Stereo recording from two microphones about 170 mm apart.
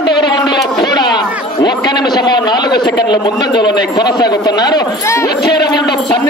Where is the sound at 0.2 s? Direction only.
25° left (ahead or behind).